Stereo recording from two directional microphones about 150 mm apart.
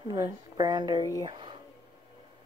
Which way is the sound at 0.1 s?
25° right (ahead or behind).